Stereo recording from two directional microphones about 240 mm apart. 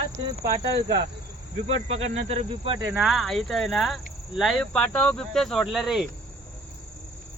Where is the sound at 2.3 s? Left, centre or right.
Right.